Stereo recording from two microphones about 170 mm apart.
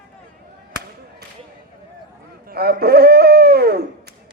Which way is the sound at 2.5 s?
65° right (ahead or behind).